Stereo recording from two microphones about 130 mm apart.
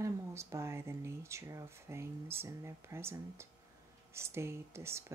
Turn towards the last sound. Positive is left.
turn(degrees=-20)  # may be behind; listen again after turning